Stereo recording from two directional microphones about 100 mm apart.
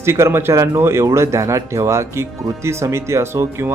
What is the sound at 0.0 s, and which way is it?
Speech, 25° right (ahead or behind).